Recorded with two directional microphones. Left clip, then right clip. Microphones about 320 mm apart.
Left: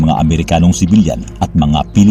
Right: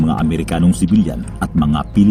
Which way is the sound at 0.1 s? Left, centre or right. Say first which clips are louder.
Left 6 dB; centre.